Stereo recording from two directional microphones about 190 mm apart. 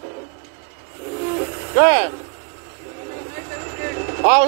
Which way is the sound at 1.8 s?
30° right (ahead or behind).